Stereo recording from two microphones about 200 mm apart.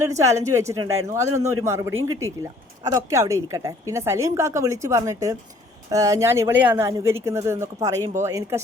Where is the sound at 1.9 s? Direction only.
85° right.